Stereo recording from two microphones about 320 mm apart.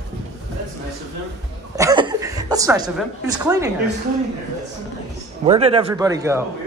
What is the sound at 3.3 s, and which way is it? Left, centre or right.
Speech, centre.